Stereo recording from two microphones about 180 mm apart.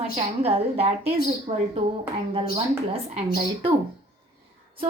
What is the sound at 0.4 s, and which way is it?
A woman's voice, 35° right (ahead or behind).